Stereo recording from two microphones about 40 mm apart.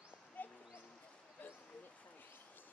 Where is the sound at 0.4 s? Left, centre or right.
Left.